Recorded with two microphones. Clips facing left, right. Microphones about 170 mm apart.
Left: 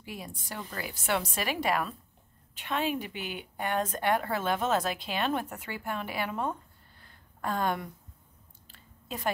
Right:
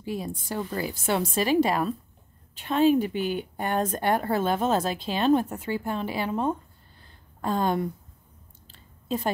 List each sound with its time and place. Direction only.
0.0 s a woman's voice: 30° right (ahead or behind)
7.0 s a sound: 25° right (ahead or behind)
8.6 s chewing: 25° right (ahead or behind)